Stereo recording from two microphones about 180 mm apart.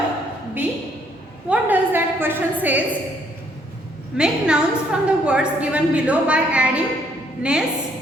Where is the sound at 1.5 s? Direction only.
10° right (ahead or behind).